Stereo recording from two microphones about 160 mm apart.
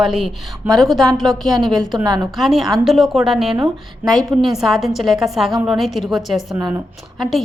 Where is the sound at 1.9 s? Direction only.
25° right (ahead or behind).